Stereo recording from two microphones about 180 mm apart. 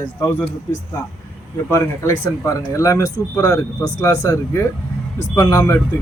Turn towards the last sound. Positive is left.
turn(degrees=15)  # may be behind; listen again after turning